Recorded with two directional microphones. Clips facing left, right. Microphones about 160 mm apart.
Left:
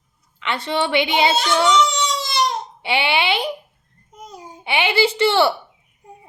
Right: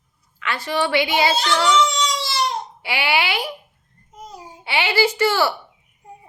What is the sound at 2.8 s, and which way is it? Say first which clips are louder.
Speech: left 2 dB; 20° left (ahead or behind).